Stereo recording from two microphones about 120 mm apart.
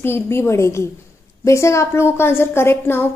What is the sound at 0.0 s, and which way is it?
A woman's voice, 20° left (ahead or behind).